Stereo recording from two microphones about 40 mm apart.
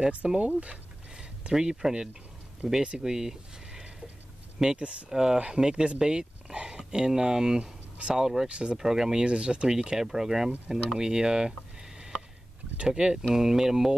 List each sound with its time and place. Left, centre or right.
0.4 s speech: right
1.5 s speech: centre
8.5 s speech: right
8.7 s speech: centre
9.2 s speech: right
9.7 s speech: centre